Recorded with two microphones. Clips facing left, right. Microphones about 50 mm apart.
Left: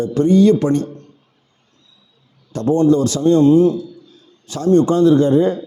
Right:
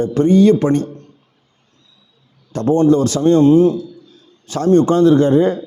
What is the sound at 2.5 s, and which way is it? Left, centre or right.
Speech, right.